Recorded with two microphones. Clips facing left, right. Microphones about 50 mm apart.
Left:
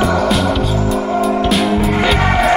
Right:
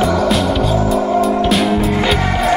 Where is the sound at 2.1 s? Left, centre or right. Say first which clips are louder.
Left 3 dB; left.